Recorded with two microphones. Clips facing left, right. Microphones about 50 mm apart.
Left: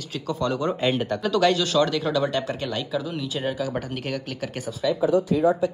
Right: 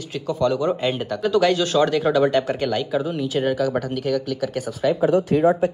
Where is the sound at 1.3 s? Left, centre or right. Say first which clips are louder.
Right 3 dB; right.